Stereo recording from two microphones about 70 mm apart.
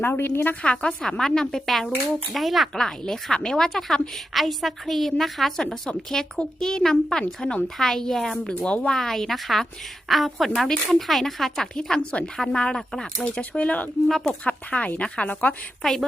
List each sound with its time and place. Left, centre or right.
0.0 s a woman's voice: left
0.6 s a woman's voice: centre
8.6 s a woman's voice: centre
9.0 s a woman's voice: centre
15.8 s a woman's voice: centre